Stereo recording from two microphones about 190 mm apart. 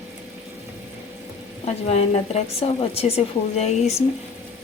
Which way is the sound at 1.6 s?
35° left (ahead or behind).